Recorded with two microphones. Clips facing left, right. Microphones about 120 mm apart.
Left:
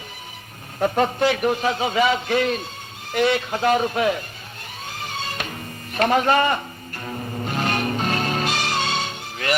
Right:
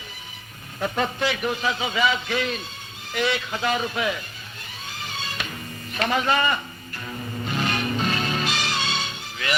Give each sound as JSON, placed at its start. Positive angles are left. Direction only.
{"t": 0.8, "sound": "a man's voice", "side_deg": 45}
{"t": 4.9, "sound": "music", "side_deg": 50}
{"t": 7.0, "sound": "music", "side_deg": 35}